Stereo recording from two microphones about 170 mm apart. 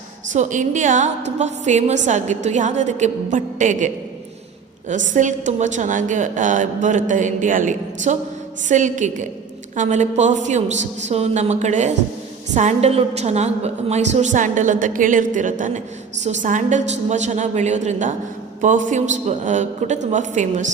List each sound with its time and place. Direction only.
0.3 s a woman's voice: 45° right (ahead or behind)